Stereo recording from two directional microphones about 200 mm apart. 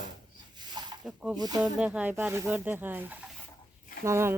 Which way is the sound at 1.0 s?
5° right (ahead or behind).